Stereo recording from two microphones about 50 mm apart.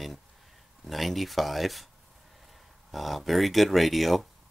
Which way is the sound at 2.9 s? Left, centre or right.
Centre.